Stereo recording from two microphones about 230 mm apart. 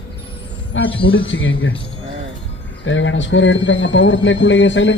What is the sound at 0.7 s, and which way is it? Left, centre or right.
Speech, left.